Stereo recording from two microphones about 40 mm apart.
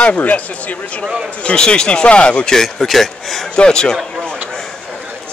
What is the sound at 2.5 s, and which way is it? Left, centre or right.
Speech, centre.